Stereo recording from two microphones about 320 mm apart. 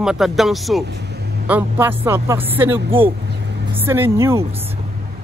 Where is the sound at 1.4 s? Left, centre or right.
Centre.